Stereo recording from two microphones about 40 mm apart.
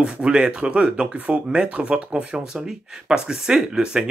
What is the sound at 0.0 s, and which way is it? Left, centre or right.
Speech, right.